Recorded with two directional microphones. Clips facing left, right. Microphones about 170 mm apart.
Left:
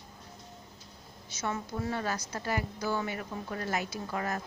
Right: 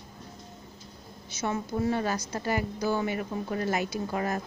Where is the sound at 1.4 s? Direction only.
20° right (ahead or behind).